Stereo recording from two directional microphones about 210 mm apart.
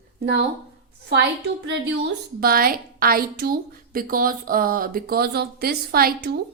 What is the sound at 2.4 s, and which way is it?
A woman's voice, 45° right (ahead or behind).